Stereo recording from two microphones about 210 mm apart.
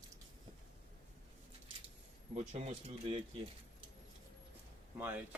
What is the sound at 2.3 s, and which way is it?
Speech, 35° right (ahead or behind).